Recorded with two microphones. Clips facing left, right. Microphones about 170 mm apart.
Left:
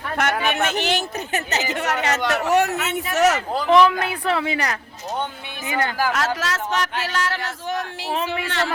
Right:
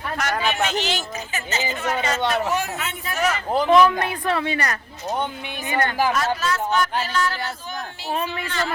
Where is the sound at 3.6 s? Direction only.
Centre (ahead or behind).